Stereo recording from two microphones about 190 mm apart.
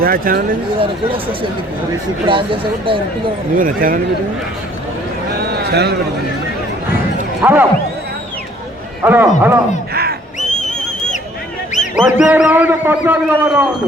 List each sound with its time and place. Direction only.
0.0 s speech: 50° right (ahead or behind)
0.8 s speech: 30° right (ahead or behind)
3.6 s speech: 45° right (ahead or behind)
5.4 s a sound: 55° right (ahead or behind)
7.4 s a man's voice: 10° right (ahead or behind)
9.0 s a man's voice: 10° right (ahead or behind)
9.9 s crow: 55° right (ahead or behind)
11.7 s a sound: 40° left (ahead or behind)
12.2 s a man's voice: 5° right (ahead or behind)